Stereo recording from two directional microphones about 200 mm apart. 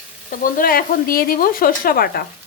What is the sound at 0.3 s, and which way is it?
A woman's voice, 45° left (ahead or behind).